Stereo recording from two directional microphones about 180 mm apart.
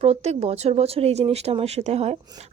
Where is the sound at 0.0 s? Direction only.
35° right (ahead or behind).